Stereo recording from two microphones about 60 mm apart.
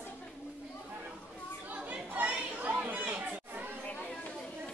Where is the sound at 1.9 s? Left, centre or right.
Right.